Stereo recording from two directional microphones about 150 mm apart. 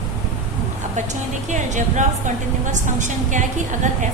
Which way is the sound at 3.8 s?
55° right (ahead or behind).